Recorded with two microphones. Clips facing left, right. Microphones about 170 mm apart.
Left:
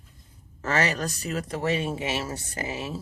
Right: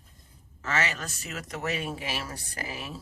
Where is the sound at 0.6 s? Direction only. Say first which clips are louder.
Left 5 dB; 40° left (ahead or behind).